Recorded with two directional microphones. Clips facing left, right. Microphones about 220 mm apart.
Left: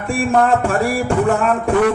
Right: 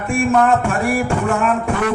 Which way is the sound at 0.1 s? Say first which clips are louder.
Even; 35° left (ahead or behind).